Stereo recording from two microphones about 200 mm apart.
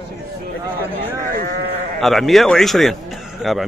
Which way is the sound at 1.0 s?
50° right (ahead or behind).